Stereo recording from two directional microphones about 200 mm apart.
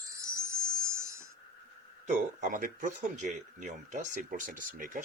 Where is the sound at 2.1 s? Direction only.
40° right (ahead or behind).